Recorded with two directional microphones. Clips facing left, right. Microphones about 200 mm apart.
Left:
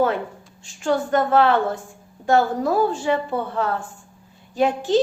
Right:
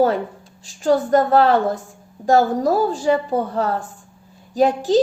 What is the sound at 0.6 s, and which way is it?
A woman's voice, 35° right (ahead or behind).